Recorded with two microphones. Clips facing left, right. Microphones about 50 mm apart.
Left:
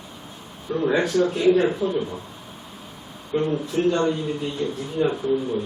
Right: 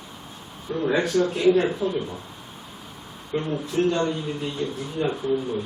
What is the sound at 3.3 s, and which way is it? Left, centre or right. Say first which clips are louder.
Speech: left 2 dB; centre.